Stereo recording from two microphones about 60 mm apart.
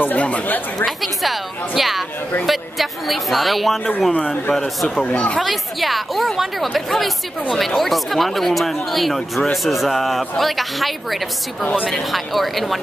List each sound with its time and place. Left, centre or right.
0.0 s speech: left
0.8 s speech: centre
4.1 s speech: centre
5.4 s speech: centre